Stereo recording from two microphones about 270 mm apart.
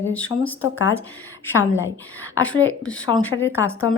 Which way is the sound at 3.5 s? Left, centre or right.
Centre.